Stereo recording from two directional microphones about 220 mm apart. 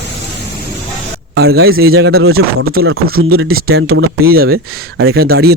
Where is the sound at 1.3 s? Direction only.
45° right (ahead or behind).